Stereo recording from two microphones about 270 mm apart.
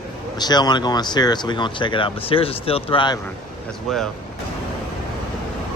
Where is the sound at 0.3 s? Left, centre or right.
Centre.